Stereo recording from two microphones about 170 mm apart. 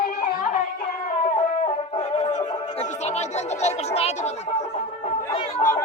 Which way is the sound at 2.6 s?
45° left (ahead or behind).